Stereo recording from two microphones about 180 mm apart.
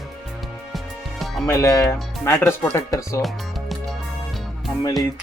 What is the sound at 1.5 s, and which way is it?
Speech, 15° left (ahead or behind).